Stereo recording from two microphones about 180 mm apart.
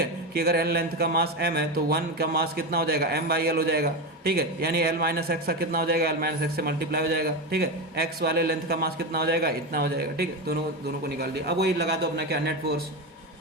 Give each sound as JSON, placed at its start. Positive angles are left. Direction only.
{"t": 0.3, "sound": "speech", "side_deg": -60}